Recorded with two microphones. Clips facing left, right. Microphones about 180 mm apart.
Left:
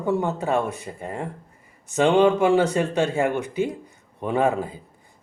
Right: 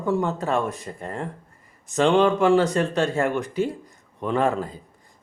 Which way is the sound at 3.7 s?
10° left (ahead or behind).